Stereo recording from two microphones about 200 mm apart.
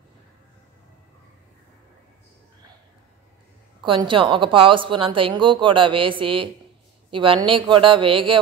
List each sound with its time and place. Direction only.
3.8 s a woman's voice: 25° right (ahead or behind)